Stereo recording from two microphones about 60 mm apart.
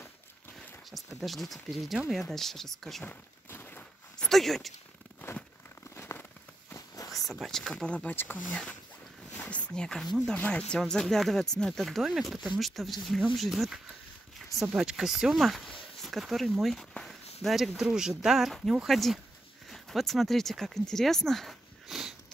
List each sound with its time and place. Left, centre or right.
0.9 s speech: centre
3.1 s a sound: left
4.2 s speech: centre
7.2 s speech: centre
7.7 s speech: left
9.5 s speech: left
9.8 s speech: centre
10.3 s speech: left
10.8 s speech: centre
17.0 s speech: centre